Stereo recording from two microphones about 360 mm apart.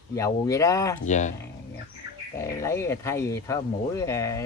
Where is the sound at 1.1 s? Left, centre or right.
Centre.